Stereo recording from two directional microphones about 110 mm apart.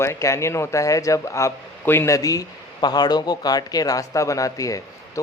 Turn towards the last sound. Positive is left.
turn(degrees=30)  # may be behind; listen again after turning